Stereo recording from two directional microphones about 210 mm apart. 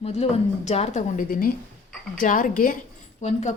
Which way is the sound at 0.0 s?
30° left (ahead or behind).